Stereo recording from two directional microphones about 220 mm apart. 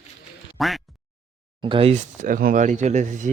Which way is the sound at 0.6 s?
Centre (ahead or behind).